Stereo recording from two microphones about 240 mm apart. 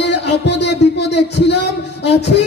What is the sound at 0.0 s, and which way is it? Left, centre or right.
Music, left.